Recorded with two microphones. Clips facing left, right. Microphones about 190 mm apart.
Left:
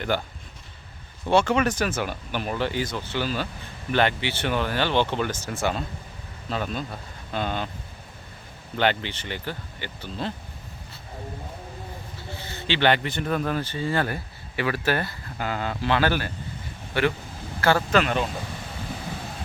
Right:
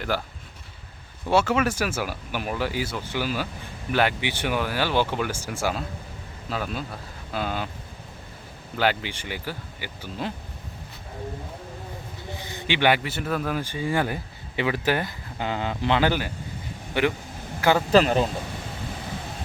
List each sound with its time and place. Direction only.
0.0 s speech: centre (ahead or behind)
1.3 s a man's voice: 5° right (ahead or behind)
8.8 s a man's voice: 5° right (ahead or behind)
12.3 s a man's voice: 15° right (ahead or behind)
17.9 s speech: 35° right (ahead or behind)